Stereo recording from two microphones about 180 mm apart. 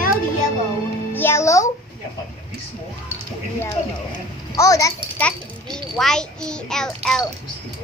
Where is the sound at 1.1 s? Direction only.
15° left (ahead or behind).